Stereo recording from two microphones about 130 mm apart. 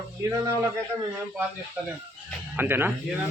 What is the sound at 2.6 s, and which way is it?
Speech, 15° right (ahead or behind).